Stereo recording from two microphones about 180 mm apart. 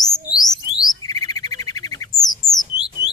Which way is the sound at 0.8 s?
20° left (ahead or behind).